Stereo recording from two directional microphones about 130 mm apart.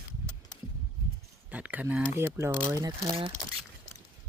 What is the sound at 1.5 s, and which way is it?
Speech, 10° right (ahead or behind).